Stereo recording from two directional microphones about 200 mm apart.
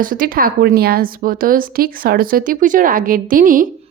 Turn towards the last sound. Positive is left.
turn(degrees=-45)  # may be behind; listen again after turning